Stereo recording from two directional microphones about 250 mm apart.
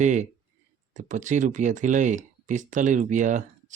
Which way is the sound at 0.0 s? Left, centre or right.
Right.